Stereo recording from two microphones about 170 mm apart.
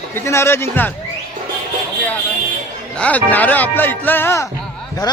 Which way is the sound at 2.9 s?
10° left (ahead or behind).